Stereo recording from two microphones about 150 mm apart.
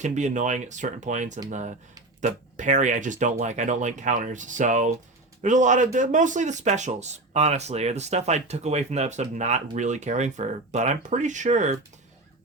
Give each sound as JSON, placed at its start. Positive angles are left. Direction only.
{"t": 0.0, "sound": "a man's voice", "side_deg": -55}